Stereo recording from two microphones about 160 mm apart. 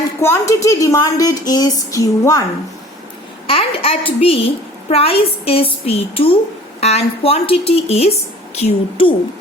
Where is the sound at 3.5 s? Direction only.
35° left (ahead or behind).